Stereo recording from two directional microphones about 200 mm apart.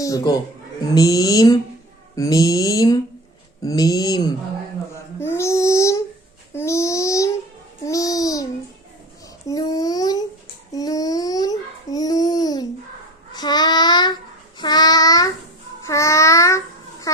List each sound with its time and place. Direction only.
0.0 s a man's voice: 15° left (ahead or behind)
6.5 s a sound: 15° left (ahead or behind)
7.9 s babbling: 15° left (ahead or behind)
9.5 s babbling: 20° left (ahead or behind)
13.3 s child singing: 20° left (ahead or behind)